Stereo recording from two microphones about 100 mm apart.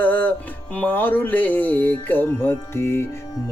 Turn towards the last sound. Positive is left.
turn(degrees=25)  # may be behind; listen again after turning